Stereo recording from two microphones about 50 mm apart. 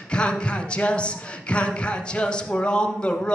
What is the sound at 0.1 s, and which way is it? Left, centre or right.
Speech, left.